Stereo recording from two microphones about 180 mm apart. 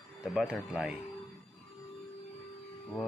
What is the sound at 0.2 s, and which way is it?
Speech, centre (ahead or behind).